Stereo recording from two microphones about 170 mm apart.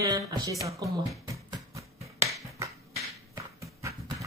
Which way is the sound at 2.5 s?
15° right (ahead or behind).